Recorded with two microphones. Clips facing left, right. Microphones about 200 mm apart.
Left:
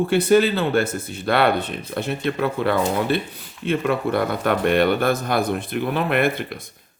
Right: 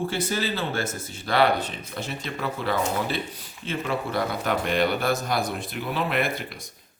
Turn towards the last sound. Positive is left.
turn(degrees=55)  # may be behind; listen again after turning